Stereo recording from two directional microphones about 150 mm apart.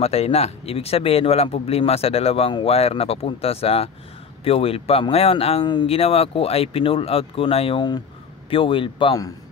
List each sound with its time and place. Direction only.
0.0 s speech: 45° left (ahead or behind)
5.6 s speech: 30° left (ahead or behind)